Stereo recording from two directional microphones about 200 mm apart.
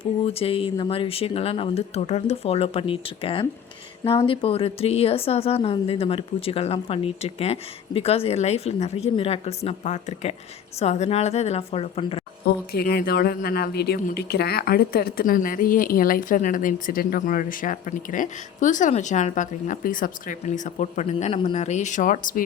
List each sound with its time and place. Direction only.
0.0 s a woman's voice: 30° left (ahead or behind)
12.7 s a woman's voice: 50° left (ahead or behind)